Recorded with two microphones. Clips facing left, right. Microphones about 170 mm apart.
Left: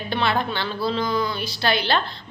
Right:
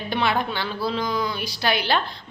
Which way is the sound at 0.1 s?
15° right (ahead or behind).